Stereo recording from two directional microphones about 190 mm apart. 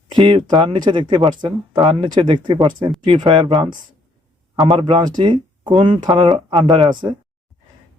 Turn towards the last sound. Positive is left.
turn(degrees=-25)  # may be behind; listen again after turning